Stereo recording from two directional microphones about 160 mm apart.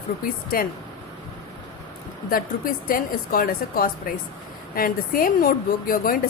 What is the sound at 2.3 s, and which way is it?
Speech, 65° left (ahead or behind).